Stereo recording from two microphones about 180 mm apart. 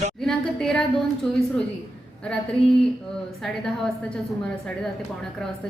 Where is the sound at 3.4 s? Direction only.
Centre (ahead or behind).